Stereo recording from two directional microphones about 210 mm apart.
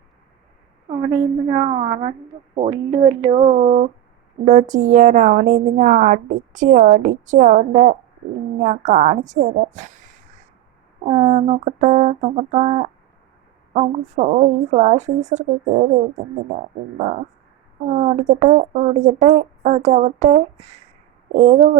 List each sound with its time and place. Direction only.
1.1 s speech: 15° right (ahead or behind)
1.6 s a woman's voice: 30° right (ahead or behind)
2.6 s speech: 15° right (ahead or behind)
3.2 s a woman's voice: 30° right (ahead or behind)
17.9 s a woman's voice: 35° right (ahead or behind)